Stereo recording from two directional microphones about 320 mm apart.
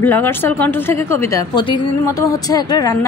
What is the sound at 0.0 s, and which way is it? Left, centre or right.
A woman's voice, centre.